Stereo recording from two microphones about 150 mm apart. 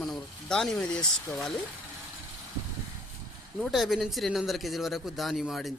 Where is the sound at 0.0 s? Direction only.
5° left (ahead or behind).